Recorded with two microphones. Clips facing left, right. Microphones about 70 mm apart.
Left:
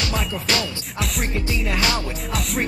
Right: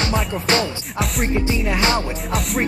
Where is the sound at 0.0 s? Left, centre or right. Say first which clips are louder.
Right 4 dB; right.